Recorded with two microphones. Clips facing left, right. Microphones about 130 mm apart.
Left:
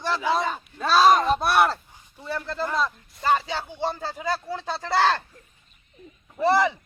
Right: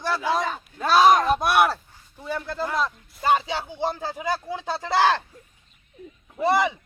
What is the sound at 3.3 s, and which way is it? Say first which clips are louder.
Speech: right 1 dB; 15° right (ahead or behind).